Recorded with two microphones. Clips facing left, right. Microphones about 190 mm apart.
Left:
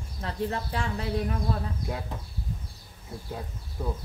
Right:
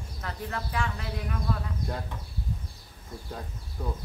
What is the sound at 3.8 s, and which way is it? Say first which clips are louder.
Speech: left 2 dB; 5° left (ahead or behind).